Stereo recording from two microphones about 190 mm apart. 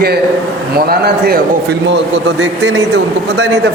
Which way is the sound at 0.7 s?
55° right (ahead or behind).